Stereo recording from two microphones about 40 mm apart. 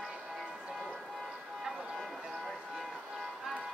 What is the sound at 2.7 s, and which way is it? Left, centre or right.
Music, centre.